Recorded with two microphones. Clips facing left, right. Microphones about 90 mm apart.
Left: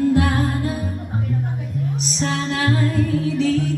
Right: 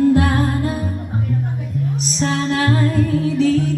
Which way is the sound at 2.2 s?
40° right (ahead or behind).